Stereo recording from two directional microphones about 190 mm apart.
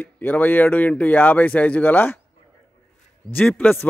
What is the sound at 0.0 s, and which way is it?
A man's voice, 10° left (ahead or behind).